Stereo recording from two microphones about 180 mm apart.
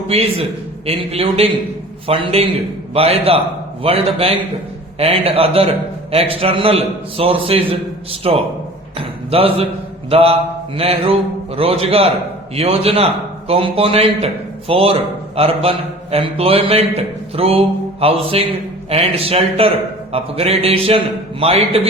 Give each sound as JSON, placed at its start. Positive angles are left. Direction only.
{"t": 0.1, "sound": "a man's voice", "side_deg": -35}
{"t": 9.0, "sound": "a sound", "side_deg": -30}
{"t": 10.1, "sound": "a man's voice", "side_deg": -35}
{"t": 16.1, "sound": "a man's voice", "side_deg": -30}